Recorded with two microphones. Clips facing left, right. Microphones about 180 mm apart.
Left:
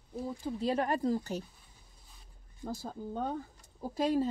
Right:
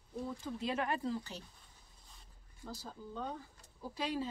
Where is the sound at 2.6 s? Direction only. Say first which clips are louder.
Left 8 dB; 50° left (ahead or behind).